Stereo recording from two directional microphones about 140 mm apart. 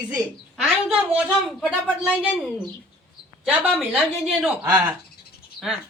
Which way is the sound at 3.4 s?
10° right (ahead or behind).